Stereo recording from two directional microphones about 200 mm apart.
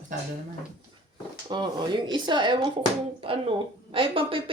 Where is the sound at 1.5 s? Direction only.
20° right (ahead or behind).